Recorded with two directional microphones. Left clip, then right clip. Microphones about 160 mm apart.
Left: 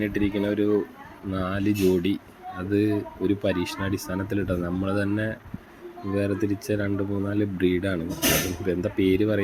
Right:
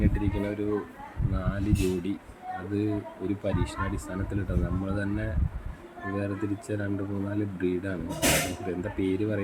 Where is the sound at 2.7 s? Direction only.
25° left (ahead or behind).